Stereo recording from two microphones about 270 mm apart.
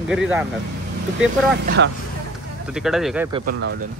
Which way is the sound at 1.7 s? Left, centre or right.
Right.